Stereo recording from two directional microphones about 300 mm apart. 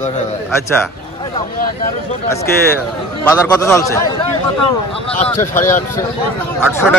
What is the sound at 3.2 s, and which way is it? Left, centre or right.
Speech, centre.